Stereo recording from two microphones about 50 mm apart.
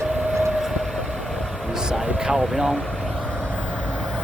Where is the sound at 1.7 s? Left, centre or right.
Centre.